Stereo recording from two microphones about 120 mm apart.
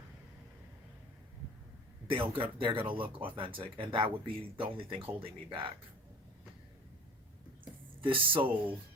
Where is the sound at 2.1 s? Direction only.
45° right (ahead or behind).